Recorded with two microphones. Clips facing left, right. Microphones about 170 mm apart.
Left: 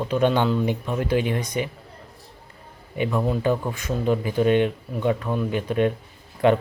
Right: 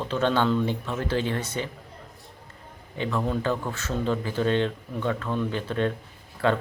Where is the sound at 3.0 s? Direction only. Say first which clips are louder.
Left 4 dB; 15° left (ahead or behind).